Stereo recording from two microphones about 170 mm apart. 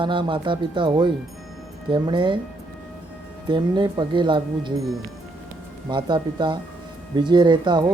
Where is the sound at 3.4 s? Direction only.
25° right (ahead or behind).